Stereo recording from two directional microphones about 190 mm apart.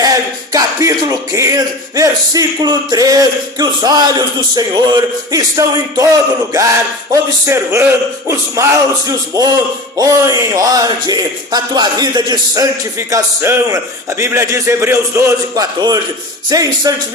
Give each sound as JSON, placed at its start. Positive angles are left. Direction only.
{"t": 0.0, "sound": "speech", "side_deg": -20}